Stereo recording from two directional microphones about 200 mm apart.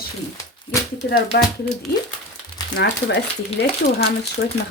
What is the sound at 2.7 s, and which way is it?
Speech, 60° left (ahead or behind).